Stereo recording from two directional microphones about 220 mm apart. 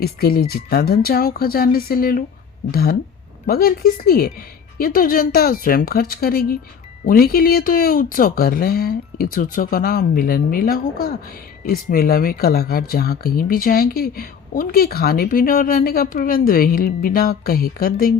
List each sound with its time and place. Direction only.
0.0 s speech: 45° left (ahead or behind)